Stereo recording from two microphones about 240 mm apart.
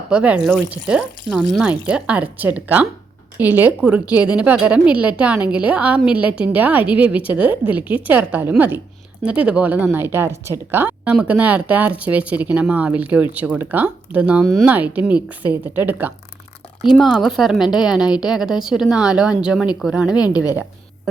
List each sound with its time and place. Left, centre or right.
0.1 s a woman's voice: centre
20.1 s a woman's voice: centre